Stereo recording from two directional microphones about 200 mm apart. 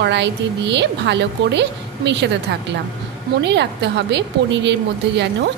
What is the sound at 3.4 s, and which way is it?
A woman's voice, 60° right (ahead or behind).